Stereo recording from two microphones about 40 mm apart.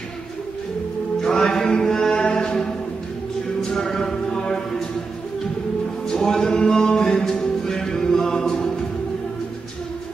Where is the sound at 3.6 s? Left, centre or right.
Centre.